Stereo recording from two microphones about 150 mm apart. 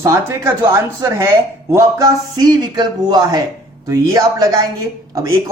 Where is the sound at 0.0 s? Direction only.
20° right (ahead or behind).